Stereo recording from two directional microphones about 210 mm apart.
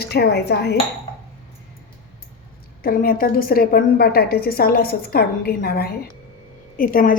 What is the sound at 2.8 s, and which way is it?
A woman's voice, 45° left (ahead or behind).